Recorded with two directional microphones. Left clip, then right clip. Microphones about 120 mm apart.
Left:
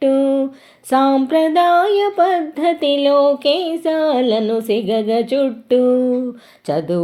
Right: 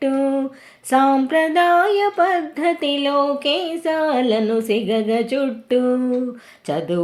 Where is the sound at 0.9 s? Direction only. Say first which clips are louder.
Left 1 dB; 40° left (ahead or behind).